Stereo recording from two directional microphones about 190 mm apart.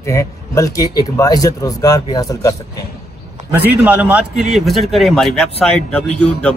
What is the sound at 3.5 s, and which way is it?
A man's voice, 10° right (ahead or behind).